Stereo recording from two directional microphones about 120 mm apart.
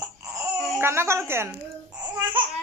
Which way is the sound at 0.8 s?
20° right (ahead or behind).